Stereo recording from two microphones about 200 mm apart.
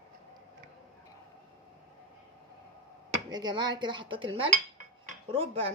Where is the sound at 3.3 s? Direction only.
20° right (ahead or behind).